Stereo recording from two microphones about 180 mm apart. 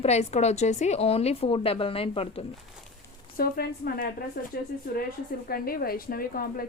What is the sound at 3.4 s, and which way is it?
A woman's voice, 60° left (ahead or behind).